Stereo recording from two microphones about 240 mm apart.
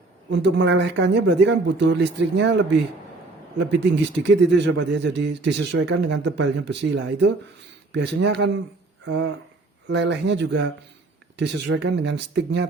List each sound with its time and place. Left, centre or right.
0.3 s speech: right
3.6 s speech: right